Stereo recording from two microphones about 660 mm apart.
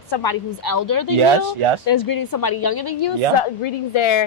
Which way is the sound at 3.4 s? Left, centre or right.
Left.